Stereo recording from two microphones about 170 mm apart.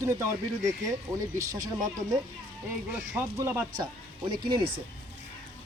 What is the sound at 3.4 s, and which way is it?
Speech, 15° right (ahead or behind).